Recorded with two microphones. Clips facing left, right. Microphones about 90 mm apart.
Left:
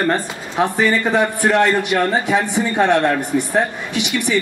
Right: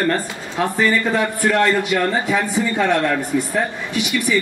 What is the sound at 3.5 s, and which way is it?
Speech, 80° left.